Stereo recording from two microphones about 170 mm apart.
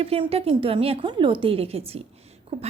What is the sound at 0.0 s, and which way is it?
Speech, 35° right (ahead or behind).